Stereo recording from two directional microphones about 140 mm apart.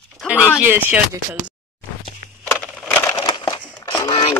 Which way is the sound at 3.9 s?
35° left (ahead or behind).